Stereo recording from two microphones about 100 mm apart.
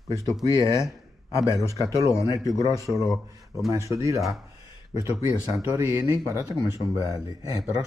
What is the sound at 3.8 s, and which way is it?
Speech, 30° right (ahead or behind).